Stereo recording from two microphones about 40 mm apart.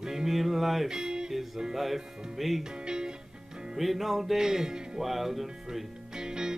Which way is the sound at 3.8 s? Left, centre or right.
Centre.